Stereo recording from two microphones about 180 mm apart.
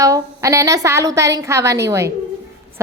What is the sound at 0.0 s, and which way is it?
A woman's voice, 20° right (ahead or behind).